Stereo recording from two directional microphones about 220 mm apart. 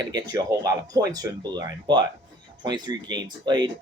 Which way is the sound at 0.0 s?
20° right (ahead or behind).